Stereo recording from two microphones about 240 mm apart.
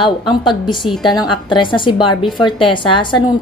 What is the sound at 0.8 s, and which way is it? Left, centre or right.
Speech, centre.